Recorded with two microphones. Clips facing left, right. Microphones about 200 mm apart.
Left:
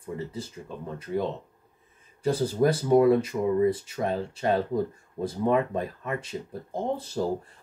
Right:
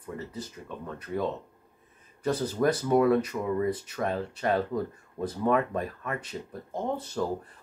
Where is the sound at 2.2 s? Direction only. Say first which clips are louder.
Left 2 dB; 30° left (ahead or behind).